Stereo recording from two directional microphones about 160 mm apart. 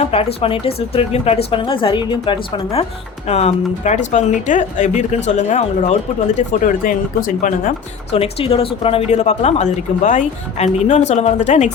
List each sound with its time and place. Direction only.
0.0 s a woman's voice: 40° left (ahead or behind)
3.2 s speech: 45° left (ahead or behind)
8.1 s speech: 40° left (ahead or behind)